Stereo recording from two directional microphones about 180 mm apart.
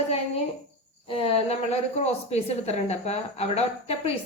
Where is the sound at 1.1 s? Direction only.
30° left (ahead or behind).